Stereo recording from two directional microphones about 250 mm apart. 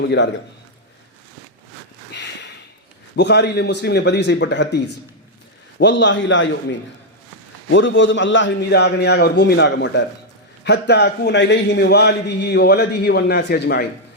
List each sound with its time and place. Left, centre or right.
0.0 s a man's voice: left
2.1 s a sound: left
3.2 s a man's voice: left
5.8 s a man's voice: left